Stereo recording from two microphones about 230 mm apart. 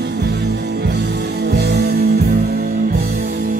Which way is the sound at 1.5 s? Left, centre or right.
Right.